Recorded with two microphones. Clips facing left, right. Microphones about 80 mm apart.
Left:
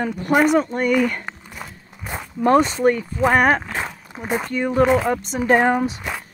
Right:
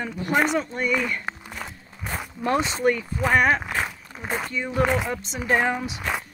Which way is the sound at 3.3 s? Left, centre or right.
Left.